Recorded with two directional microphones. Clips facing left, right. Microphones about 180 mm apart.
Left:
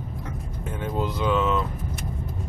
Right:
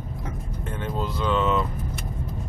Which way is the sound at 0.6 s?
5° left (ahead or behind).